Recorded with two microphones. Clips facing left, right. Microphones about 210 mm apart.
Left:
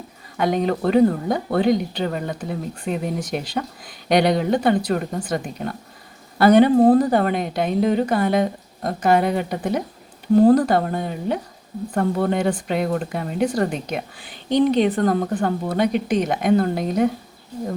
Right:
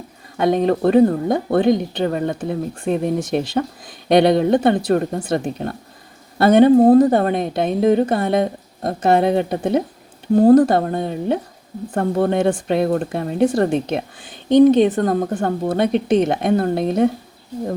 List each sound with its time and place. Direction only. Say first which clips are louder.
0.3 s a woman's voice: right 4 dB; 25° right (ahead or behind)
14.5 s a woman's voice: right 7 dB; 50° right (ahead or behind)
14.8 s a woman's voice: right 3 dB; 20° right (ahead or behind)